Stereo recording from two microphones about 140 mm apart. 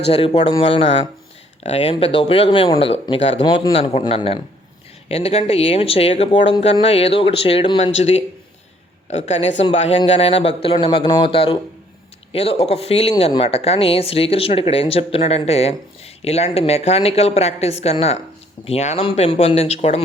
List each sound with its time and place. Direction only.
0.1 s speech: 45° left (ahead or behind)
3.4 s speech: 35° left (ahead or behind)
7.9 s speech: 50° left (ahead or behind)